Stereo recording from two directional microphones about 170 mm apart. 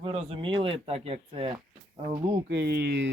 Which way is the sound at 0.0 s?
35° right (ahead or behind).